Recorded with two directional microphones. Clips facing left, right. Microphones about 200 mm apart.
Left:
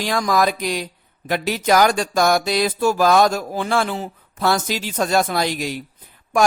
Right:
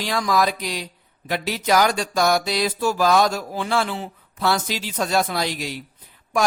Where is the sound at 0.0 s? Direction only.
45° left (ahead or behind).